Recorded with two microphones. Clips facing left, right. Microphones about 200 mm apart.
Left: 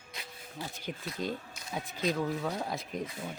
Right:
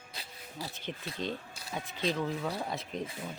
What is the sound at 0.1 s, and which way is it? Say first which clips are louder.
Zipper: left 2 dB; 30° right (ahead or behind).